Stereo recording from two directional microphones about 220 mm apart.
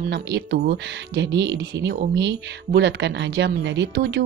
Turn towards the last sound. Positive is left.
turn(degrees=-50)  # may be behind; listen again after turning